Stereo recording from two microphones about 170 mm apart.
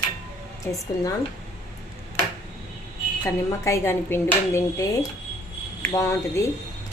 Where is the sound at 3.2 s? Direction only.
20° left (ahead or behind).